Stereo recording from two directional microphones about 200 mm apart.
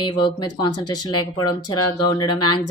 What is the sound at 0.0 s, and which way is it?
Speech, 25° left (ahead or behind).